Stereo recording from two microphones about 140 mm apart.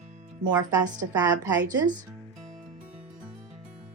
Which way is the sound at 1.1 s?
25° right (ahead or behind).